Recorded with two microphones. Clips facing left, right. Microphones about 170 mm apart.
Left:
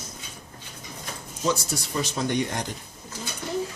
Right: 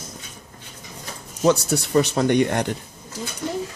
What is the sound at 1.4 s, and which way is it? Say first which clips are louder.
Speech: right 8 dB; 65° right (ahead or behind).